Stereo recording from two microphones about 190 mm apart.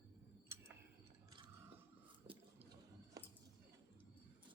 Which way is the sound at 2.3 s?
25° right (ahead or behind).